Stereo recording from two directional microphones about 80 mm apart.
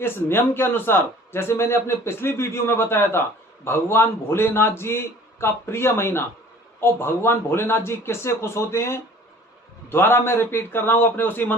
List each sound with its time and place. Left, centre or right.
0.0 s a man's voice: left